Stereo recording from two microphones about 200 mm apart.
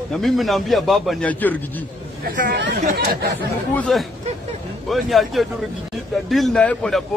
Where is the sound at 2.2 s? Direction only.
55° right (ahead or behind).